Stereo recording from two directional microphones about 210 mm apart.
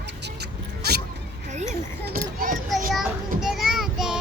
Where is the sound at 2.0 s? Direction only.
45° right (ahead or behind).